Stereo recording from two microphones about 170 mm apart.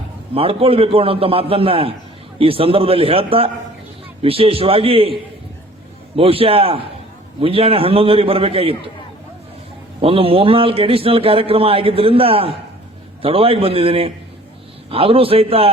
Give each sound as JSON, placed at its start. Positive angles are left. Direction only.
{"t": 0.3, "sound": "a man's voice", "side_deg": -35}
{"t": 6.1, "sound": "a man's voice", "side_deg": -35}
{"t": 10.0, "sound": "a man's voice", "side_deg": -35}